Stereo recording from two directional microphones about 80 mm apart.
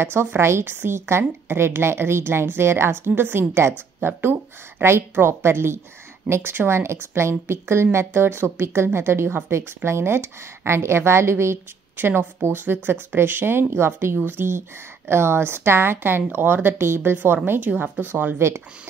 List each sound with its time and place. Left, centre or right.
0.0 s a woman's voice: right